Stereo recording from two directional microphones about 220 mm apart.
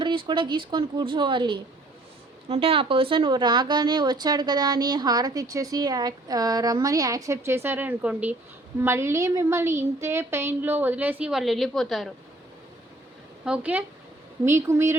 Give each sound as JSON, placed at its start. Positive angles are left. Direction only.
{"t": 0.0, "sound": "a woman's voice", "side_deg": -20}
{"t": 13.4, "sound": "speech", "side_deg": -5}